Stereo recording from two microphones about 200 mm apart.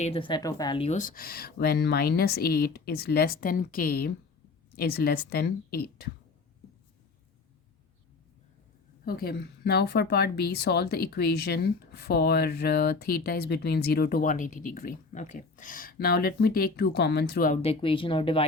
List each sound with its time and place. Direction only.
0.0 s speech: 25° left (ahead or behind); by 6.1 s 50° left (ahead or behind)
9.0 s speech: 50° left (ahead or behind)
17.6 s speech: 30° left (ahead or behind)